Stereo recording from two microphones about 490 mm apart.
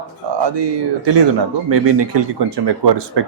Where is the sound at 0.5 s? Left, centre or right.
Right.